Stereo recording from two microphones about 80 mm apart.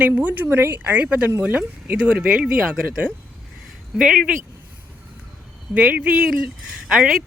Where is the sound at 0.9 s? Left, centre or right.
Centre.